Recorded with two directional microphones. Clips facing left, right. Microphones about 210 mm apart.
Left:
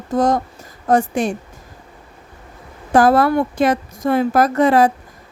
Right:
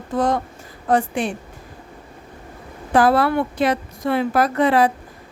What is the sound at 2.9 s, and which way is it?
Speech, 45° left (ahead or behind).